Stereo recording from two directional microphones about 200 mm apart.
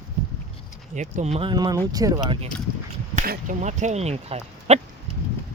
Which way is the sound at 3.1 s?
40° right (ahead or behind).